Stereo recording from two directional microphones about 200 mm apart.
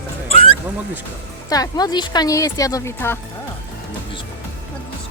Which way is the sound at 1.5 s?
20° left (ahead or behind).